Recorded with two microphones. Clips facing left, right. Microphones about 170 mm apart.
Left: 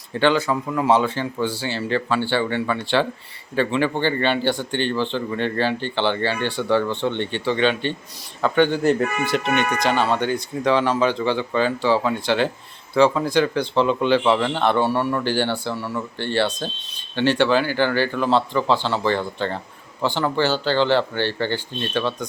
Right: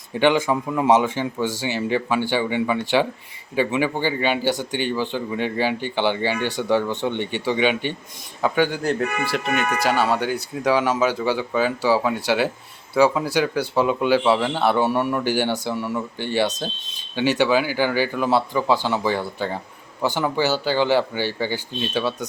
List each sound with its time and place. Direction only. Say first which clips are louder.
0.1 s speech: right 1 dB; 15° right (ahead or behind)
8.8 s speech: left 3 dB; 5° left (ahead or behind)